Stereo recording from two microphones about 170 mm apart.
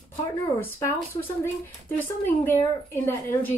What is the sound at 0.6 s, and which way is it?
Speech, 15° left (ahead or behind).